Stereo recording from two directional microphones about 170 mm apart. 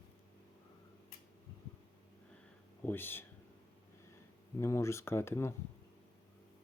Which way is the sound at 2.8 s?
10° left (ahead or behind).